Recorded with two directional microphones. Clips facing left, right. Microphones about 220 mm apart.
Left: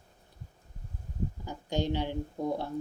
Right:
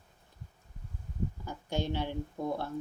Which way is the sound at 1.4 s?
15° left (ahead or behind).